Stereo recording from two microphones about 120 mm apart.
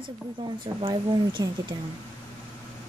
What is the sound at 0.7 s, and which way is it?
Speech, 45° right (ahead or behind).